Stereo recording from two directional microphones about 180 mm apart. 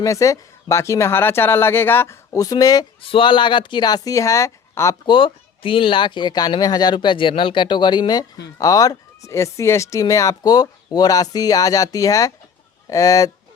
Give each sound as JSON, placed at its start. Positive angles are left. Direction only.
{"t": 0.0, "sound": "speech", "side_deg": 20}
{"t": 5.0, "sound": "speech", "side_deg": 25}